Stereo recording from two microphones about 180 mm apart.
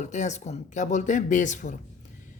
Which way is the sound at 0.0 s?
40° left (ahead or behind).